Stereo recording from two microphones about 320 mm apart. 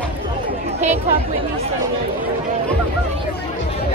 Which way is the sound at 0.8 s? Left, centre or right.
Right.